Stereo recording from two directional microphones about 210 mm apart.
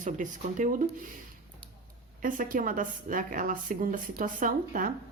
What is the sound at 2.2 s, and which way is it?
A woman's voice, 40° right (ahead or behind).